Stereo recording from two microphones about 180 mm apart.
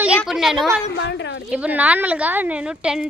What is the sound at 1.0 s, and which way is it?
Speech, 75° left (ahead or behind).